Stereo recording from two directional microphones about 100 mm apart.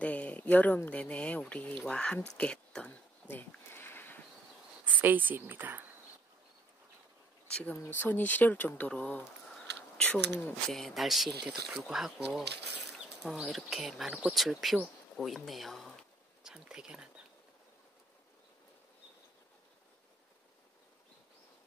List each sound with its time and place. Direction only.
0.0 s speech: 15° left (ahead or behind)
2.3 s a sound: 10° left (ahead or behind)
4.8 s speech: 15° right (ahead or behind)
7.4 s speech: 10° left (ahead or behind); by 17.1 s 10° right (ahead or behind)